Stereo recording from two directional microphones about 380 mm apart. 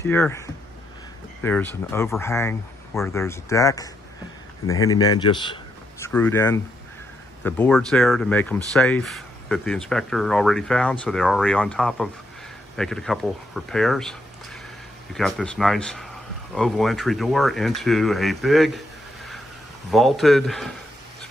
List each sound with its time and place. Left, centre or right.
0.0 s a man's voice: centre
19.9 s speech: centre